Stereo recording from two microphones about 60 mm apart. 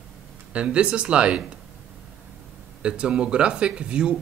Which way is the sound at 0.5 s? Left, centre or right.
Centre.